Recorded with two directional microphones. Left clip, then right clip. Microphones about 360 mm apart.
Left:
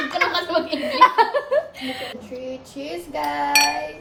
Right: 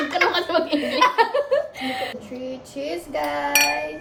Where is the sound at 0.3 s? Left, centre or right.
Centre.